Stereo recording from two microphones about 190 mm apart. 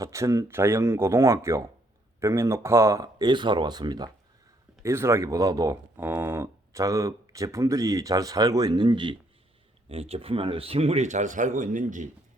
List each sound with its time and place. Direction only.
0.0 s speech: 15° right (ahead or behind); by 12.1 s 40° right (ahead or behind)